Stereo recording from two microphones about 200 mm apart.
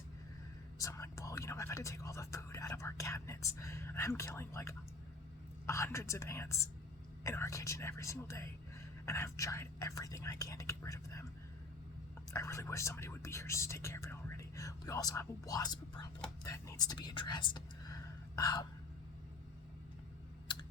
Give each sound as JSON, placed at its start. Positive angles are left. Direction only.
{"t": 0.8, "sound": "speech", "side_deg": 15}
{"t": 12.3, "sound": "speech", "side_deg": 15}